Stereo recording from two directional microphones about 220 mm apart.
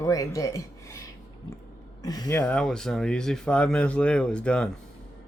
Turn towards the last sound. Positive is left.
turn(degrees=5)  # may be behind; listen again after turning